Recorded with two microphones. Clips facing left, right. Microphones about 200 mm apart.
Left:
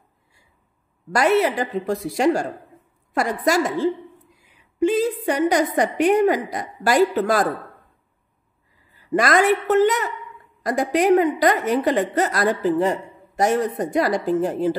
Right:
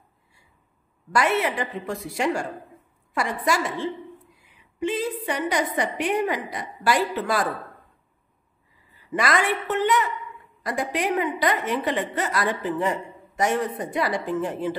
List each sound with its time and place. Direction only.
1.1 s a woman's voice: 40° left (ahead or behind)
9.1 s a woman's voice: 45° left (ahead or behind)